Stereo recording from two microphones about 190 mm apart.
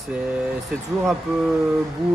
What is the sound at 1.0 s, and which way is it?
Speech, centre (ahead or behind).